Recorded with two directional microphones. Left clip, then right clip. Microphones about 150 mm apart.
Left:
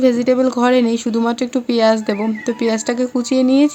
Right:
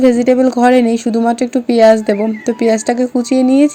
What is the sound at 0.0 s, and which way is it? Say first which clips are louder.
Speech: right 4 dB; 20° right (ahead or behind).